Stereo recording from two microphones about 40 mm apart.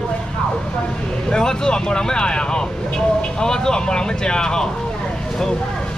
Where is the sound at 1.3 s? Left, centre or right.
Centre.